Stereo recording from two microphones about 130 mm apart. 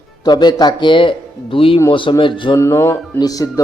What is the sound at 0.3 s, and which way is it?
Speech, 35° left (ahead or behind).